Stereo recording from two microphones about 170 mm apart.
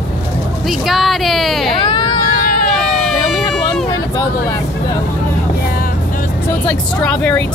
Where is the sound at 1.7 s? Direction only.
25° left (ahead or behind).